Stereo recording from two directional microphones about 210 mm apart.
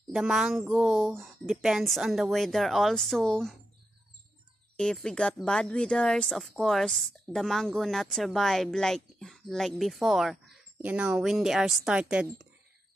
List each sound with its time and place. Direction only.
0.1 s speech: centre (ahead or behind)
4.7 s speech: centre (ahead or behind)